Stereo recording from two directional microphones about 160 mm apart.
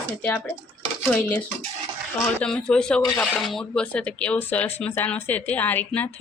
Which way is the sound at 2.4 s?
5° left (ahead or behind).